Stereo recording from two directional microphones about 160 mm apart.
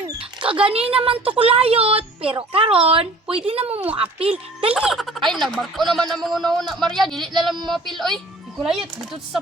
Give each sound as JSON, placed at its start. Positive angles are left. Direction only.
{"t": 0.6, "sound": "speech", "side_deg": -35}
{"t": 4.7, "sound": "speech", "side_deg": -5}